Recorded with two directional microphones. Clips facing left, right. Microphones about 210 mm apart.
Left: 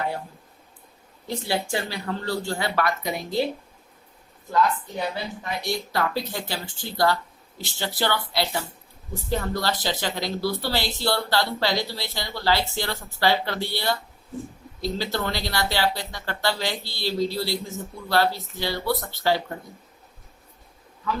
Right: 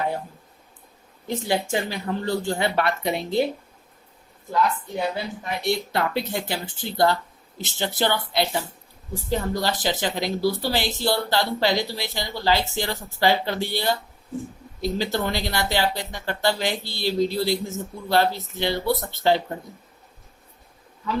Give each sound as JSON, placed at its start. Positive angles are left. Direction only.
{"t": 1.3, "sound": "speech", "side_deg": -20}
{"t": 5.6, "sound": "speech", "side_deg": -25}